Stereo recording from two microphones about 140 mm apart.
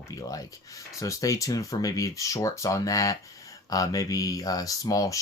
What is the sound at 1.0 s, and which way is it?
Speech, 25° left (ahead or behind).